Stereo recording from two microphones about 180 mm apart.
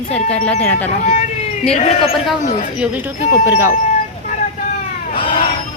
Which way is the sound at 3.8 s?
45° left (ahead or behind).